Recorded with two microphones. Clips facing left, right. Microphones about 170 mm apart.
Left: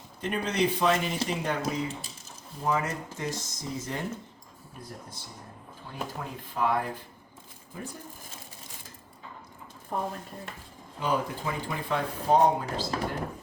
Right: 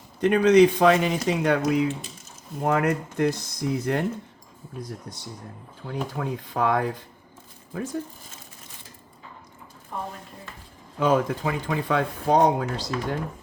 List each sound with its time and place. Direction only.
0.2 s a man's voice: 75° right (ahead or behind)
5.9 s speech: 90° right
9.9 s speech: 40° left (ahead or behind)
11.0 s speech: 90° right
12.9 s speech: 35° left (ahead or behind)